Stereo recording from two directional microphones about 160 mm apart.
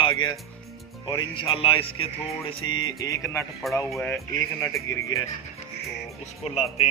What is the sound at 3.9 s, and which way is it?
Speech, 5° left (ahead or behind).